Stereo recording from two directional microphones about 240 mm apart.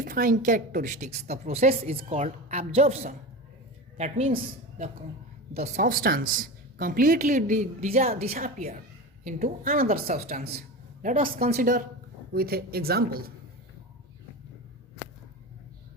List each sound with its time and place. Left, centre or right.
0.0 s a woman's voice: right
5.5 s a woman's voice: right